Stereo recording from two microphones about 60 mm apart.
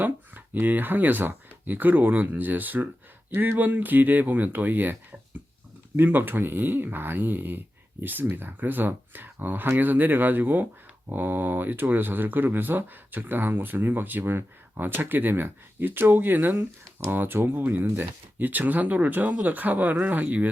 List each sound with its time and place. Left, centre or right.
0.0 s speech: right
6.0 s speech: right